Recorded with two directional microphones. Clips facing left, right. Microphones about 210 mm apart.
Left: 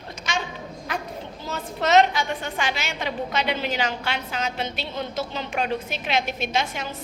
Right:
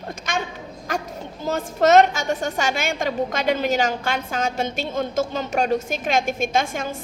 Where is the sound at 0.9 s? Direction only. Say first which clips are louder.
Right 4 dB; 45° right (ahead or behind).